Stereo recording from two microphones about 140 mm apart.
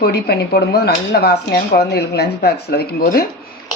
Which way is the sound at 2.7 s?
90° left.